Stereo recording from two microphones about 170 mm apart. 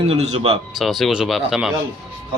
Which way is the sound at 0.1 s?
40° right (ahead or behind).